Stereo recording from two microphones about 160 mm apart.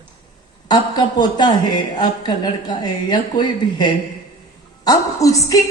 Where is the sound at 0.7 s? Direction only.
25° left (ahead or behind).